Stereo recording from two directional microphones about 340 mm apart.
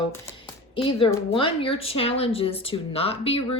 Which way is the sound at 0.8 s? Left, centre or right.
Centre.